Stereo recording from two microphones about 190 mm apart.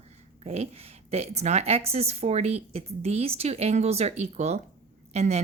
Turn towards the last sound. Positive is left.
turn(degrees=-35)  # may be behind; listen again after turning